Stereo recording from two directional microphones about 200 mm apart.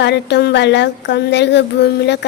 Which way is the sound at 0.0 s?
60° left (ahead or behind).